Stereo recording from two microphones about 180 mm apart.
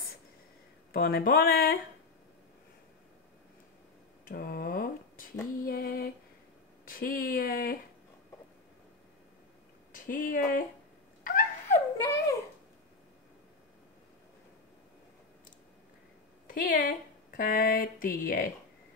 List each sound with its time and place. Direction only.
0.9 s speech: 55° left (ahead or behind)
4.3 s a sound: 55° left (ahead or behind)
5.7 s female singing: 55° left (ahead or behind)
6.9 s speech: 55° left (ahead or behind)
9.9 s speech: 50° left (ahead or behind)
11.7 s a sound: 15° left (ahead or behind)
16.4 s speech: 50° left (ahead or behind)